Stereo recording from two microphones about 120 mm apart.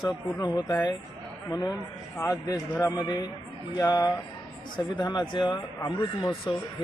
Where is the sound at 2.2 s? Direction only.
30° left (ahead or behind).